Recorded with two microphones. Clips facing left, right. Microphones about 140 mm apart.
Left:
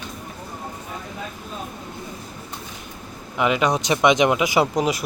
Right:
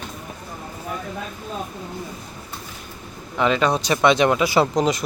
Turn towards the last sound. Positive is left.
turn(degrees=10)  # may be behind; listen again after turning